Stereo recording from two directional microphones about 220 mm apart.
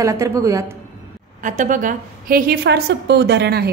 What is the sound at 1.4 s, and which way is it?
A woman's voice, 35° right (ahead or behind).